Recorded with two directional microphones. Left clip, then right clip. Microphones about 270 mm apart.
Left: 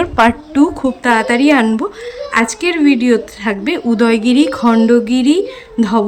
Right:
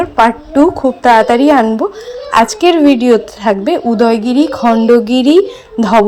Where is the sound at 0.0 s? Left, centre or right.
Centre.